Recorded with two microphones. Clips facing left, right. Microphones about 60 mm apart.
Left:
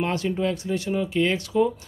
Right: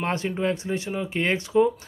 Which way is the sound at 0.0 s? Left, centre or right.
Right.